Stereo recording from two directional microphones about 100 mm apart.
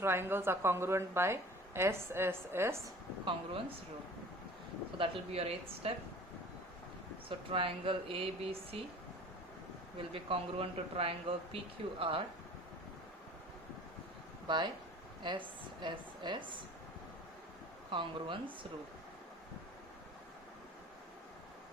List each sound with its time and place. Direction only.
0.0 s a woman's voice: 25° right (ahead or behind)
3.2 s speech: 65° right (ahead or behind)
4.9 s speech: 75° right (ahead or behind)
7.3 s speech: 65° right (ahead or behind)
10.1 s speech: 70° right (ahead or behind)
14.4 s a woman's voice: 50° right (ahead or behind)
17.9 s speech: 55° right (ahead or behind)